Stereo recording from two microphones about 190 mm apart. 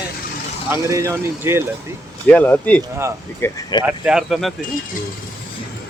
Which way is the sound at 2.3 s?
10° left (ahead or behind).